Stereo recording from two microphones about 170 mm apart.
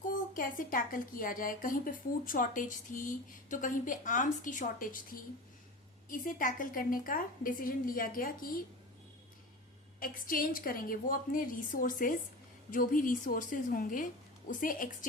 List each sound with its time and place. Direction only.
0.3 s a woman's voice: 55° left (ahead or behind)
10.0 s a woman's voice: 55° left (ahead or behind)